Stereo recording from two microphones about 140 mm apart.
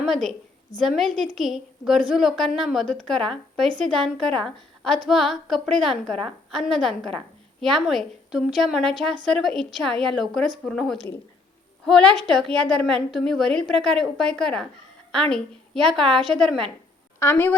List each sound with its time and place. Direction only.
0.0 s a woman's voice: centre (ahead or behind)
17.2 s a woman's voice: 15° left (ahead or behind)